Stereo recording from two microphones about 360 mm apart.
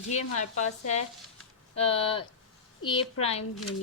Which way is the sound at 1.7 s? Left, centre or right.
Centre.